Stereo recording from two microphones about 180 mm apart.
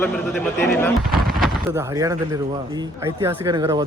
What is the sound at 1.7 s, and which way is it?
Speech, 20° right (ahead or behind).